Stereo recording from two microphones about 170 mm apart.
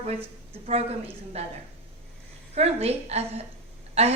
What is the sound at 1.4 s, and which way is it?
A woman's voice, 35° right (ahead or behind).